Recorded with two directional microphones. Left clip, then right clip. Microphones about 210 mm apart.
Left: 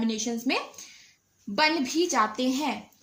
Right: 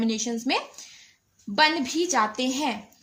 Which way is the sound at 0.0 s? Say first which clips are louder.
Right 2 dB; 30° right (ahead or behind).